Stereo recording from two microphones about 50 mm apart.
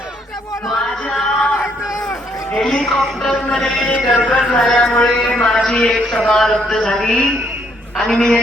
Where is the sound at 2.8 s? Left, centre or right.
Centre.